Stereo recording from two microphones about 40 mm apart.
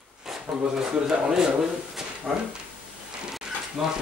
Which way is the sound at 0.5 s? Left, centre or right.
Centre.